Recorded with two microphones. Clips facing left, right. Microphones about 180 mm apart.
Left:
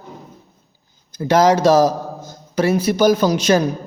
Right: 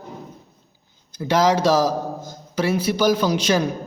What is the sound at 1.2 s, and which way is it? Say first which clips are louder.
A man's voice: left 4 dB; 45° left (ahead or behind).